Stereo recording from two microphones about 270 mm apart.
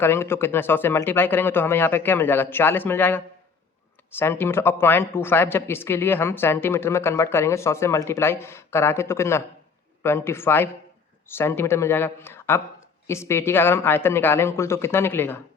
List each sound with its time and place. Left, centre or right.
0.0 s speech: centre